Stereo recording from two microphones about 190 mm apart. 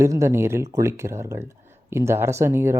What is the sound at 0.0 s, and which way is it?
Speech, 15° right (ahead or behind).